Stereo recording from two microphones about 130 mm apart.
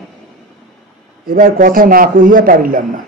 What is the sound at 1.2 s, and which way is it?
A man's voice, 90° right.